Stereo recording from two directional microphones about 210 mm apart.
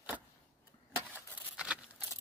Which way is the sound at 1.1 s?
5° right (ahead or behind).